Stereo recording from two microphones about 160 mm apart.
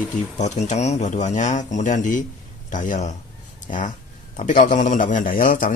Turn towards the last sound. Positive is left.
turn(degrees=60)  # may be behind; listen again after turning